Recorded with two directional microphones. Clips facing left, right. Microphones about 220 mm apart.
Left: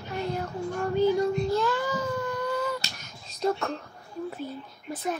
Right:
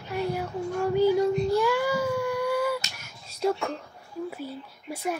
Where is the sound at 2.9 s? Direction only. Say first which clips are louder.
Left 1 dB; 10° right (ahead or behind).